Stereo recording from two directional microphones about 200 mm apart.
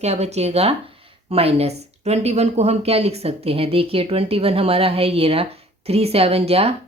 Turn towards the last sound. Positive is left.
turn(degrees=-30)  # may be behind; listen again after turning